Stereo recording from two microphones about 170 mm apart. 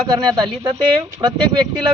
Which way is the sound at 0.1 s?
25° right (ahead or behind).